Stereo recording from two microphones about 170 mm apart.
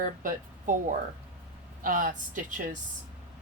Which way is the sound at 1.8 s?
55° right (ahead or behind).